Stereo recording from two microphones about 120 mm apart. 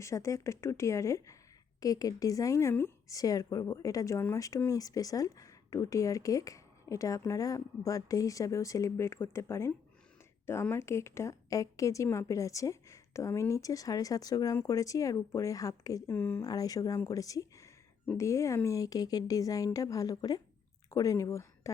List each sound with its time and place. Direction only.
0.0 s speech: 25° left (ahead or behind)
16.1 s speech: 15° left (ahead or behind)
16.4 s a woman's voice: 30° left (ahead or behind)